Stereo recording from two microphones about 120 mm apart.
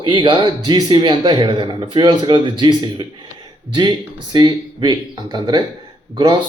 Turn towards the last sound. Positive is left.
turn(degrees=-40)  # may be behind; listen again after turning